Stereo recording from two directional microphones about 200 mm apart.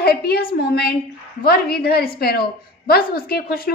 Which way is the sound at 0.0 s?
50° left (ahead or behind).